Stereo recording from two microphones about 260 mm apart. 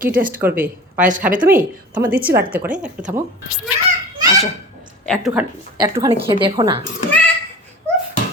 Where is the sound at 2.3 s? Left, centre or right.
Centre.